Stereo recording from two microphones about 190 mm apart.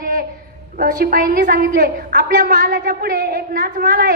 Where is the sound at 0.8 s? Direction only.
50° right (ahead or behind).